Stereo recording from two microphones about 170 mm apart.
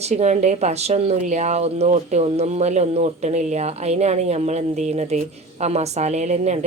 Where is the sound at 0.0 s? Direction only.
40° right (ahead or behind).